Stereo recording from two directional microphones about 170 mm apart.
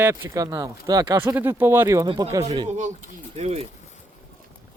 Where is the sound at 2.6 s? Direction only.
45° right (ahead or behind).